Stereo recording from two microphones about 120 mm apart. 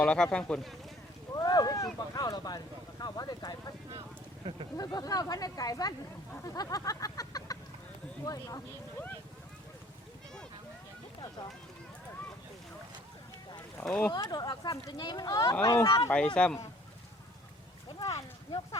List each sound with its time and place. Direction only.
0.0 s speech: 10° left (ahead or behind)
1.3 s a sound: 30° left (ahead or behind)
2.1 s speech: 30° left (ahead or behind)
4.8 s speech: 35° left (ahead or behind)
13.8 s speech: 10° left (ahead or behind)
14.1 s speech: 35° left (ahead or behind)
16.1 s speech: 10° left (ahead or behind)